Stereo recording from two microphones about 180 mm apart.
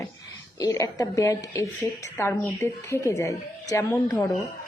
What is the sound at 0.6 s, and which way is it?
A woman's voice, 20° left (ahead or behind).